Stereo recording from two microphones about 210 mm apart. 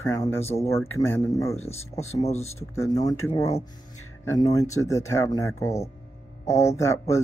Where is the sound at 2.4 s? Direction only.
15° left (ahead or behind).